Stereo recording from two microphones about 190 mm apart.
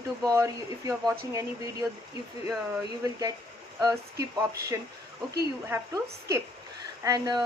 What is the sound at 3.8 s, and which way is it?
Speech, 15° right (ahead or behind).